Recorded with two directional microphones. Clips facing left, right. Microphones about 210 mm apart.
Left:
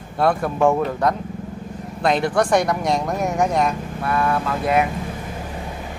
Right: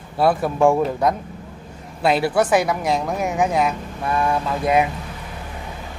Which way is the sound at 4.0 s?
15° right (ahead or behind).